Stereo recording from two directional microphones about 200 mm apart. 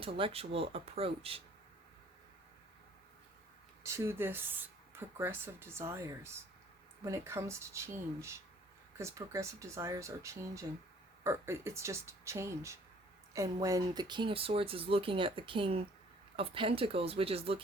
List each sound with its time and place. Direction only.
0.0 s speech: 25° right (ahead or behind)
3.8 s speech: 15° right (ahead or behind); by 17.6 s 30° right (ahead or behind)